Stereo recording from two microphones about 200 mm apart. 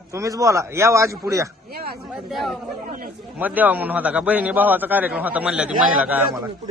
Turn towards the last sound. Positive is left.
turn(degrees=-5)  # may be behind; listen again after turning